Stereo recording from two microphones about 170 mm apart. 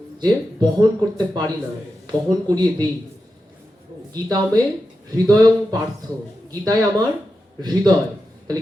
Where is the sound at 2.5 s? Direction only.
25° right (ahead or behind).